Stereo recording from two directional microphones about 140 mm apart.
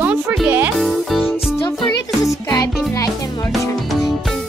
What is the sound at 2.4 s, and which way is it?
Music, 25° left (ahead or behind).